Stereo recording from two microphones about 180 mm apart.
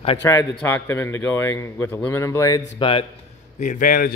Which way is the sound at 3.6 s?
45° left (ahead or behind).